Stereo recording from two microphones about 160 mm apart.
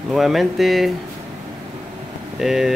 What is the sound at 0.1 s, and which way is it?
Speech, centre (ahead or behind).